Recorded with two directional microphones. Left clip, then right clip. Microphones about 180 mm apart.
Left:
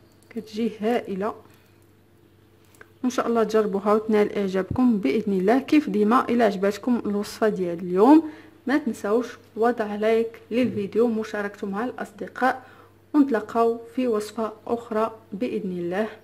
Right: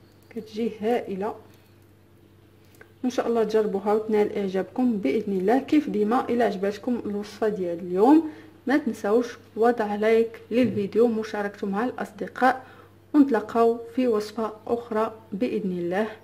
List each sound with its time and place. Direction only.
0.3 s speech: 20° left (ahead or behind)
3.0 s speech: 20° left (ahead or behind)
8.3 s speech: 5° left (ahead or behind)